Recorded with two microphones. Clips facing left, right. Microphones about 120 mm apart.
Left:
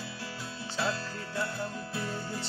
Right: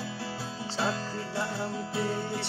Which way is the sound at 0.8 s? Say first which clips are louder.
Right 2 dB; 30° right (ahead or behind).